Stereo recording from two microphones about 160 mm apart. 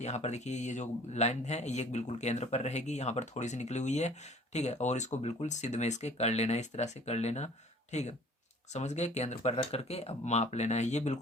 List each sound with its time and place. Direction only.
0.0 s speech: 45° left (ahead or behind)